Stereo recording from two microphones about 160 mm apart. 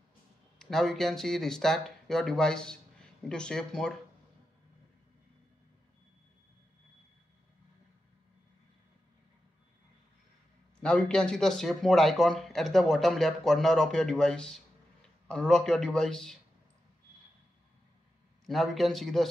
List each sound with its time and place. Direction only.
0.6 s speech: centre (ahead or behind)
10.8 s a man's voice: 5° left (ahead or behind)
18.4 s a man's voice: centre (ahead or behind)